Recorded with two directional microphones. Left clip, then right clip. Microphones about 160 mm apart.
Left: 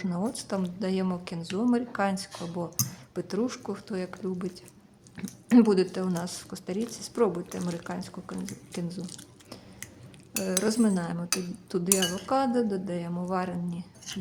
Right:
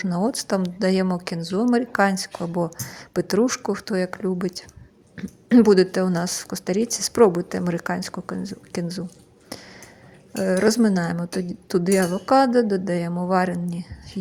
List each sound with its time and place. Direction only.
0.0 s a woman's voice: 35° right (ahead or behind)
5.1 s speech: 15° right (ahead or behind)
5.6 s a woman's voice: 35° right (ahead or behind)
10.3 s a woman's voice: 35° right (ahead or behind)